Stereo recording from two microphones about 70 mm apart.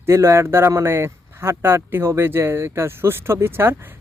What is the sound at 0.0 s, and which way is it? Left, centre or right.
Speech, right.